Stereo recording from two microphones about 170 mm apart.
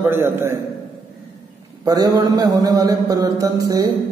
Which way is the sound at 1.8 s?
20° right (ahead or behind).